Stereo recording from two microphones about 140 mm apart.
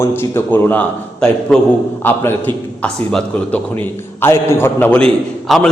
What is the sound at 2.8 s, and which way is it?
Speech, 5° left (ahead or behind).